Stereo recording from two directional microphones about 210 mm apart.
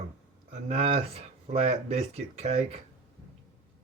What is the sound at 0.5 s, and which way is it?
Speech, 30° right (ahead or behind).